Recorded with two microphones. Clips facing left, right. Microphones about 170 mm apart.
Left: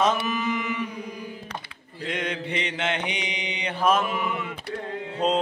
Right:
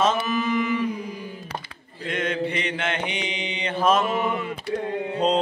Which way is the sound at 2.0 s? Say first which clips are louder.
Right 4 dB; 15° left (ahead or behind).